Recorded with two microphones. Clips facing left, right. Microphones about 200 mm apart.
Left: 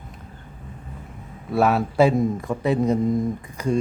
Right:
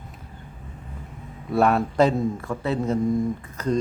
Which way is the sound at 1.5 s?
5° left (ahead or behind).